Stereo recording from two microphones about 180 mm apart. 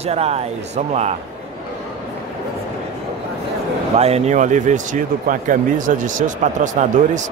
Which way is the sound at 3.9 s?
35° right (ahead or behind).